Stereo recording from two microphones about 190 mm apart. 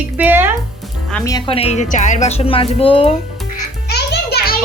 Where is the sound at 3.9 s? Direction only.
60° left (ahead or behind).